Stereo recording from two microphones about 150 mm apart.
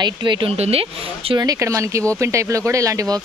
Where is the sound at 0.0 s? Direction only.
30° right (ahead or behind).